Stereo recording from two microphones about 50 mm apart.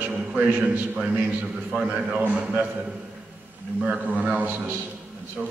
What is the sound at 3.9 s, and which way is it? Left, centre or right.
A man's voice, right.